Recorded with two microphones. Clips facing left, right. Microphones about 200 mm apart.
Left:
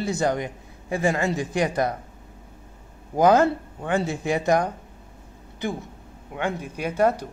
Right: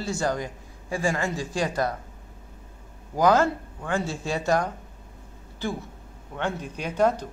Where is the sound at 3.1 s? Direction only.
20° left (ahead or behind).